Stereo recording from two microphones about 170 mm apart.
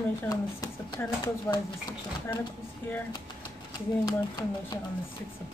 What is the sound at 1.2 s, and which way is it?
Speech, 20° left (ahead or behind).